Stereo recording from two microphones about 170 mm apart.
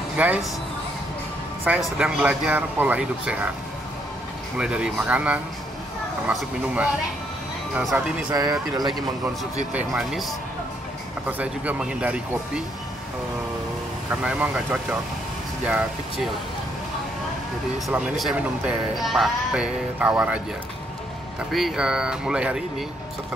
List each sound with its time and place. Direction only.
0.2 s speech: 10° right (ahead or behind)
2.0 s speech: 5° right (ahead or behind)
4.6 s speech: 5° right (ahead or behind)
7.9 s speech: 10° right (ahead or behind)
8.3 s speech: 20° right (ahead or behind)
9.4 s speech: 5° right (ahead or behind)
14.2 s speech: 5° right (ahead or behind)
17.7 s speech: 5° right (ahead or behind)
21.5 s speech: centre (ahead or behind)